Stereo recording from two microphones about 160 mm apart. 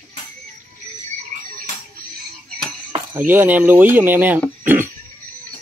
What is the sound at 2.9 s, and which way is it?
Speech, 15° right (ahead or behind).